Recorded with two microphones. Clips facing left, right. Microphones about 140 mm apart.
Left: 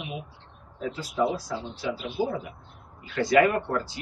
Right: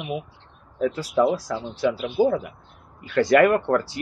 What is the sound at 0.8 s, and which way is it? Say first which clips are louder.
Speech: right 6 dB; 75° right (ahead or behind).